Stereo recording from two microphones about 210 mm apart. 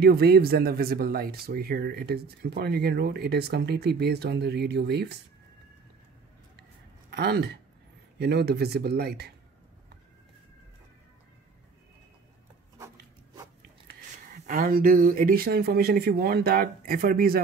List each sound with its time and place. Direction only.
0.0 s speech: 50° right (ahead or behind)
7.1 s speech: 50° right (ahead or behind)
12.7 s a sound: 15° right (ahead or behind)
14.1 s speech: 35° right (ahead or behind)